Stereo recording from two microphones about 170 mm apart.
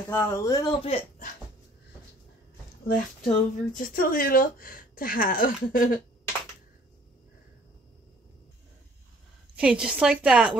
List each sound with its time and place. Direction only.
0.1 s speech: 15° left (ahead or behind)
2.9 s speech: 45° left (ahead or behind)
9.6 s a woman's voice: 5° right (ahead or behind)